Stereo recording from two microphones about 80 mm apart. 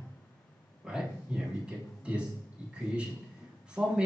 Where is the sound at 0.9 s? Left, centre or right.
Centre.